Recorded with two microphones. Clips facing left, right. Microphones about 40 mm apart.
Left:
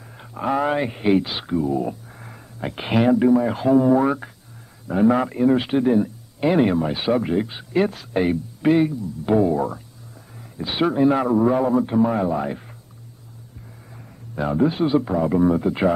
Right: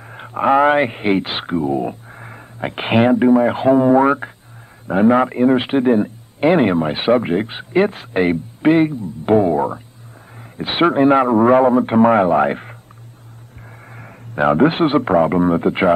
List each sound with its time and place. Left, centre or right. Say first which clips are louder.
0.0 s a man's voice: right 9 dB; right
13.9 s a man's voice: right 8 dB; right